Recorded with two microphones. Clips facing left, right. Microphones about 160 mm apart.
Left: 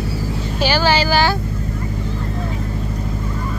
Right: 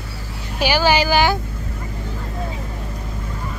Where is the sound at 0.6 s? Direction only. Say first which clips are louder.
Even; 15° right (ahead or behind).